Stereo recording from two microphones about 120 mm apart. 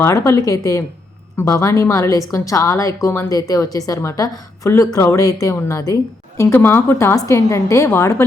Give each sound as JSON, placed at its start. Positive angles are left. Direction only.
{"t": 0.0, "sound": "a woman's voice", "side_deg": 25}